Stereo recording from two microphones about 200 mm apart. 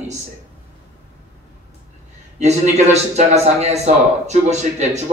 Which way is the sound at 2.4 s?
35° right (ahead or behind).